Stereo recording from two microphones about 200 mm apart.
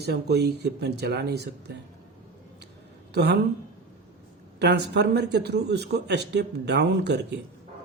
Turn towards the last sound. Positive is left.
turn(degrees=-55)  # may be behind; listen again after turning